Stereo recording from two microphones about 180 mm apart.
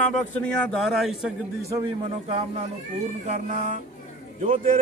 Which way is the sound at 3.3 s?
40° right (ahead or behind).